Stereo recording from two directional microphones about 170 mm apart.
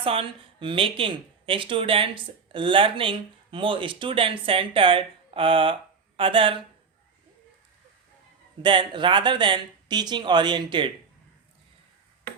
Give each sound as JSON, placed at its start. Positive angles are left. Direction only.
{"t": 0.0, "sound": "speech", "side_deg": -35}
{"t": 8.6, "sound": "speech", "side_deg": -30}